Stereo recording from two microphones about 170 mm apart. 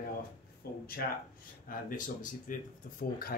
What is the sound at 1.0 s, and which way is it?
Speech, 65° left (ahead or behind).